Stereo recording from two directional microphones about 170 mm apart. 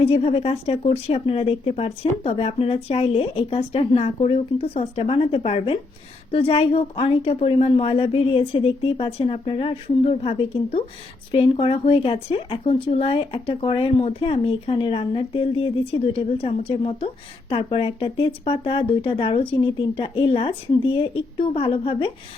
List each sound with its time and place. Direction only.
0.0 s speech: 40° left (ahead or behind)